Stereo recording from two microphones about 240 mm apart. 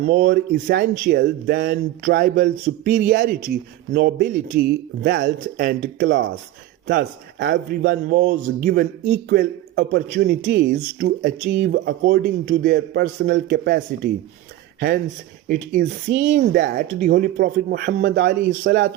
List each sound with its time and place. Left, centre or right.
0.0 s speech: right
15.4 s speech: right